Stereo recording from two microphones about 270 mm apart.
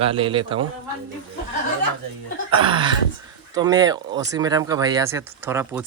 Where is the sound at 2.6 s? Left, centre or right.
Centre.